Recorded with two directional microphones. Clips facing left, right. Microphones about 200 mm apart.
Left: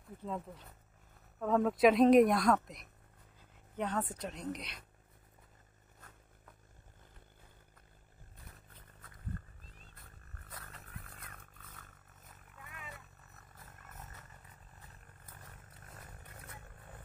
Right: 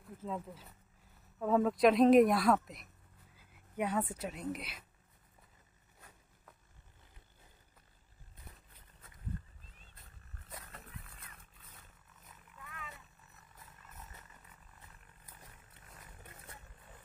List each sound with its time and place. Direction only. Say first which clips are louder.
0.2 s a woman's voice: even; centre (ahead or behind)
11.1 s roaring cats: left 4 dB; 55° left (ahead or behind)